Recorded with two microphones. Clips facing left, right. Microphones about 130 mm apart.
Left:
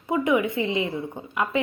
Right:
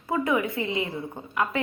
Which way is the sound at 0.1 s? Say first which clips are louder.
Left 3 dB; 20° left (ahead or behind).